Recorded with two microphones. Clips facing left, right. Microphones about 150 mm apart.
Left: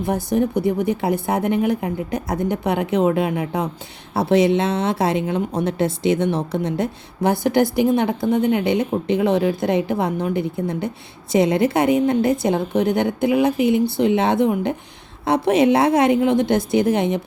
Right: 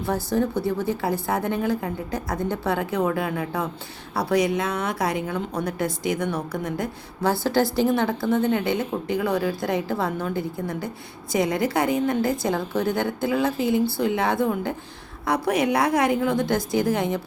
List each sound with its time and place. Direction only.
0.0 s a woman's voice: 20° left (ahead or behind)